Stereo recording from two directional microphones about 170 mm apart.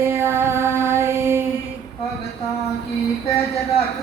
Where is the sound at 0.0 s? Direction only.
15° right (ahead or behind).